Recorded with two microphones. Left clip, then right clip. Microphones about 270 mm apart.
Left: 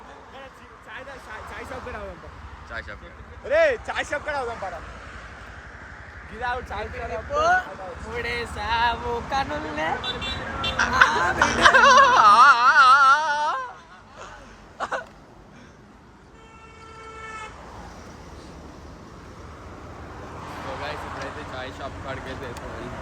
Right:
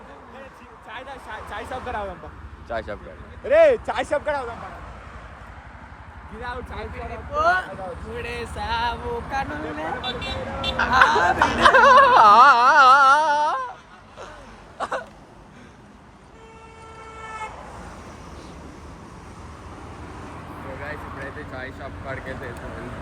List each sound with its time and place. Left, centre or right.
1.5 s speech: centre
3.4 s speech: right
6.4 s speech: left
8.2 s speech: centre
10.0 s speech: right
10.8 s a sound: centre
14.8 s a sound: centre
21.5 s speech: centre